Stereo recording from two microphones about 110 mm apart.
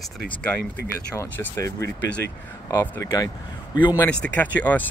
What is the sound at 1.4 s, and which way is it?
Speech, 25° left (ahead or behind).